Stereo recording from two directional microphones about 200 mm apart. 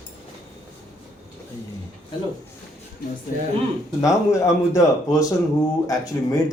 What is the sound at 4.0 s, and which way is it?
Speech, 15° left (ahead or behind).